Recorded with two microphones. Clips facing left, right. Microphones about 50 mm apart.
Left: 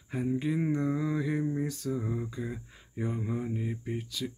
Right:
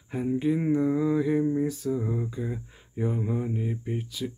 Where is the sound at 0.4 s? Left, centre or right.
Centre.